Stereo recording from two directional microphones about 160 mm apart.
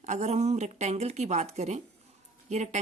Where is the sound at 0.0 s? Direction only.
45° right (ahead or behind).